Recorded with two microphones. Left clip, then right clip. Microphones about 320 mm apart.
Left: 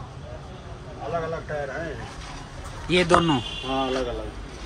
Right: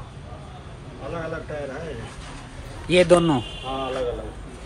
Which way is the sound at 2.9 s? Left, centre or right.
Centre.